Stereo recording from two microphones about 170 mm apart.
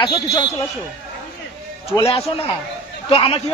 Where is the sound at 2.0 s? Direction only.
35° left (ahead or behind).